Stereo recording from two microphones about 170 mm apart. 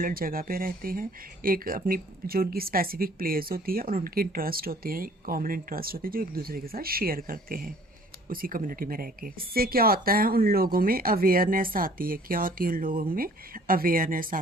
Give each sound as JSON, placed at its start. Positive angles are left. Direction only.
{"t": 0.0, "sound": "speech", "side_deg": -60}